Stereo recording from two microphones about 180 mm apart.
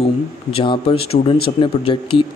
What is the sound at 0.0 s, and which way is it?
Speech, 30° left (ahead or behind).